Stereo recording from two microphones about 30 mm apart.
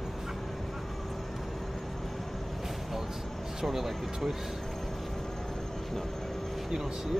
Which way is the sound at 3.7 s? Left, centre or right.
Centre.